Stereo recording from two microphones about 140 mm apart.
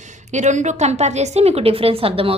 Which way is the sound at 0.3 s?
55° right (ahead or behind).